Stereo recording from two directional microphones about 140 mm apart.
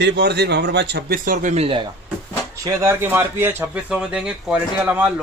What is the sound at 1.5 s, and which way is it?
Speech, 40° right (ahead or behind).